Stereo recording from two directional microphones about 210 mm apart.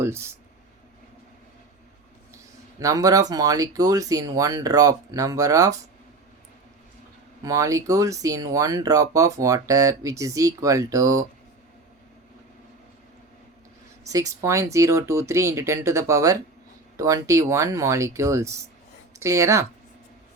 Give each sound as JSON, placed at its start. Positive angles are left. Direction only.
{"t": 0.0, "sound": "speech", "side_deg": -10}
{"t": 2.7, "sound": "speech", "side_deg": -15}
{"t": 7.4, "sound": "speech", "side_deg": -15}
{"t": 14.1, "sound": "speech", "side_deg": -15}